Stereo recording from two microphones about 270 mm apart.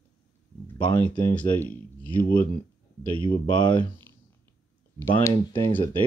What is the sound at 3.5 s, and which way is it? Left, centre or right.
Speech, centre.